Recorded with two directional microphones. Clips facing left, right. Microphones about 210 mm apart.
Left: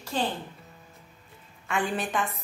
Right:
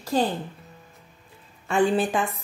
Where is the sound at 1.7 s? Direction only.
30° right (ahead or behind).